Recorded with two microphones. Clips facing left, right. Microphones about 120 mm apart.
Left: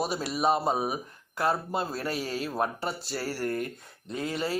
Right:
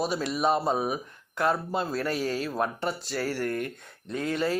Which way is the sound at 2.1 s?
40° right (ahead or behind).